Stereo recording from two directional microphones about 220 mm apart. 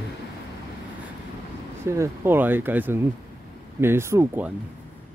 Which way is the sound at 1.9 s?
10° right (ahead or behind).